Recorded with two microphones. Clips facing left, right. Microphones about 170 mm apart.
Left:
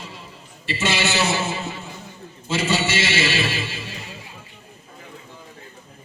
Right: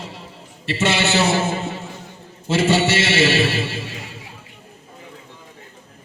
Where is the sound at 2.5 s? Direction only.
70° right (ahead or behind).